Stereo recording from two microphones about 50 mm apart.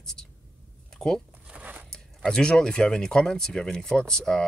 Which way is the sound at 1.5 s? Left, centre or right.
Right.